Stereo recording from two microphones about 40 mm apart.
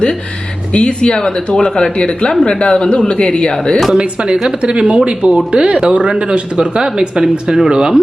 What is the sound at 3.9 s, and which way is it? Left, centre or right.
Speech, right.